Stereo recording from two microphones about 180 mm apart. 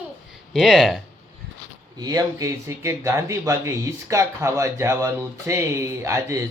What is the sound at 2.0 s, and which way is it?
Speech, 20° right (ahead or behind).